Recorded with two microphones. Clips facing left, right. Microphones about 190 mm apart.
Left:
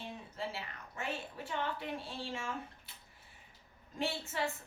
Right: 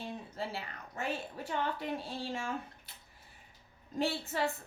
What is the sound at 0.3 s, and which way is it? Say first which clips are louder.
Speech: even; 35° right (ahead or behind).